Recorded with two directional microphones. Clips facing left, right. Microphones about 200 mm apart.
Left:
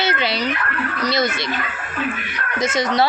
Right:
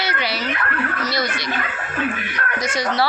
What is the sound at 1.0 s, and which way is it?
Speech, 25° left (ahead or behind).